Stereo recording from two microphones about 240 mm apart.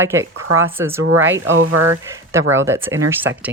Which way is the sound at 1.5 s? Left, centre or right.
Right.